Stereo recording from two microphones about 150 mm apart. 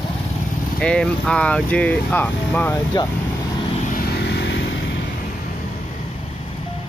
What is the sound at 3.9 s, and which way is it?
Vehicle, 90° left.